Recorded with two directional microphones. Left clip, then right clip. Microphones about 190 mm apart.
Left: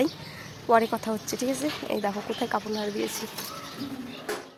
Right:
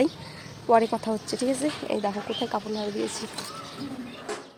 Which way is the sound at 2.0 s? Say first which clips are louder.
Even; 5° left (ahead or behind).